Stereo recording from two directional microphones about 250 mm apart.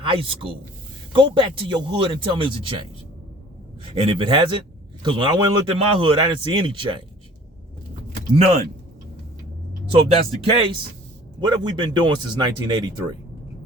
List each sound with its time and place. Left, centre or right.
0.0 s a man's voice: right
3.8 s a man's voice: right
8.4 s a man's voice: right
9.9 s a man's voice: right